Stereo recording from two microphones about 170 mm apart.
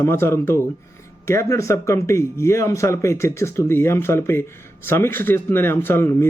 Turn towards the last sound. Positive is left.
turn(degrees=15)  # may be behind; listen again after turning